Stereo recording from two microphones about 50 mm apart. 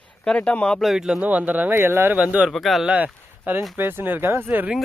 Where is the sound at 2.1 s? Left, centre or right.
Right.